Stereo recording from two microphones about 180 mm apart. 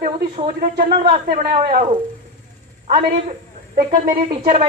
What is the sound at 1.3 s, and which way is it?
Speech, 35° right (ahead or behind).